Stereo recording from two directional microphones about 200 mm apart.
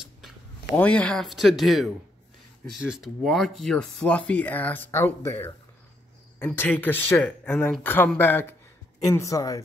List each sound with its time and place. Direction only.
0.7 s speech: 5° left (ahead or behind)